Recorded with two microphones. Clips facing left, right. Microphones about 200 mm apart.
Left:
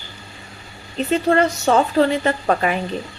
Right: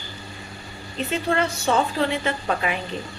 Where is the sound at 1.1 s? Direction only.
40° left (ahead or behind).